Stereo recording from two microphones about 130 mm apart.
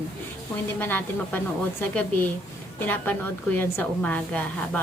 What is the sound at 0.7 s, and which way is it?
Speech, 15° left (ahead or behind).